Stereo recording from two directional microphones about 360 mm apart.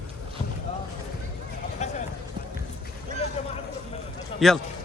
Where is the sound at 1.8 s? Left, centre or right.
Centre.